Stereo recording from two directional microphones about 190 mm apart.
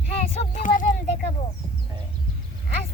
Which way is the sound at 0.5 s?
40° left (ahead or behind).